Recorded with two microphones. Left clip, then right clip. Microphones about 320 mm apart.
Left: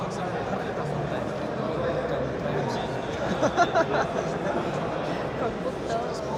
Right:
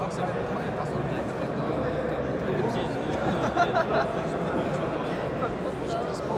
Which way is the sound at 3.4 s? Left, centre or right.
Centre.